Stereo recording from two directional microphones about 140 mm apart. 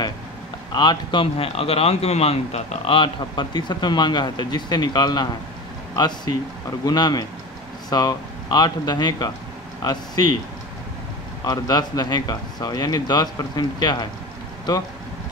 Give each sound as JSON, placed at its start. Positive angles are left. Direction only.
{"t": 0.7, "sound": "a man's voice", "side_deg": 35}
{"t": 11.4, "sound": "a man's voice", "side_deg": 25}